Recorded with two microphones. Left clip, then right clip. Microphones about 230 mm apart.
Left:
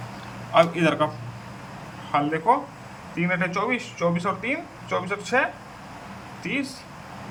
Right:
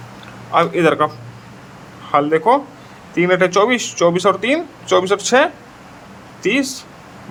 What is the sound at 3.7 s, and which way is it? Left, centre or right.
Speech, right.